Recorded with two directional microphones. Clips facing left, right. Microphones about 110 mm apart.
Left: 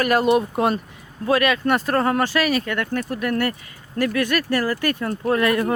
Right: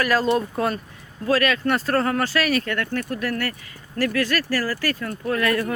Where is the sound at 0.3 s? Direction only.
15° left (ahead or behind).